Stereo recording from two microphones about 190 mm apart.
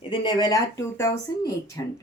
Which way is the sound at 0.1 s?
25° left (ahead or behind).